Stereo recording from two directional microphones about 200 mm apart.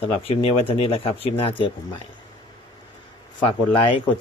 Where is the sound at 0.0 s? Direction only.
30° left (ahead or behind).